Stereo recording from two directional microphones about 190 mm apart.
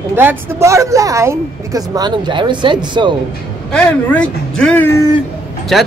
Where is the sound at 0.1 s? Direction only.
10° right (ahead or behind).